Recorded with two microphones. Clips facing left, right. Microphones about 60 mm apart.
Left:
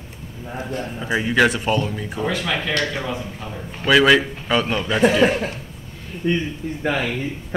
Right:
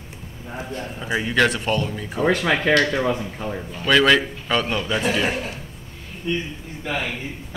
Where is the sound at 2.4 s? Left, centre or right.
Right.